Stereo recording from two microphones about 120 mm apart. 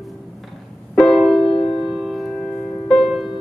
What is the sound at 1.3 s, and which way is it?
Music, 45° left (ahead or behind).